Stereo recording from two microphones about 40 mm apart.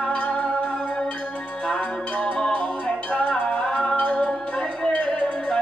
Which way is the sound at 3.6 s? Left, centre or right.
Centre.